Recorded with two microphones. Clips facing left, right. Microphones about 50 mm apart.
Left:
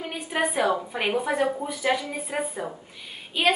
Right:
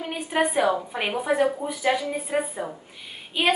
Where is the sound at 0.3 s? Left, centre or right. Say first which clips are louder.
Right 2 dB; centre.